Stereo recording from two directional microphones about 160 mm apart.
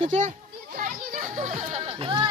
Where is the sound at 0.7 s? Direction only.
55° right (ahead or behind); by 2.3 s 30° right (ahead or behind).